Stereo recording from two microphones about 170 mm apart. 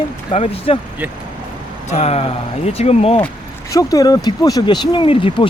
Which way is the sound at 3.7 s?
20° left (ahead or behind).